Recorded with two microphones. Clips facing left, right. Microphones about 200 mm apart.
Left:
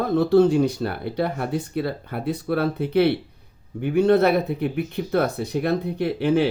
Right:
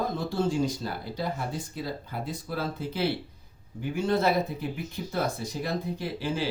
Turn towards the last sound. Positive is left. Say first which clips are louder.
# left 10 dB
turn(degrees=60)  # may be behind; listen again after turning